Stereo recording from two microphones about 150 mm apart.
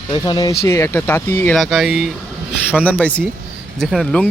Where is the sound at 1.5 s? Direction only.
Centre (ahead or behind).